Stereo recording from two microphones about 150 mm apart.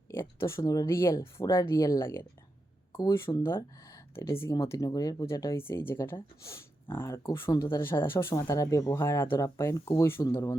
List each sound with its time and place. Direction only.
0.1 s speech: 15° left (ahead or behind)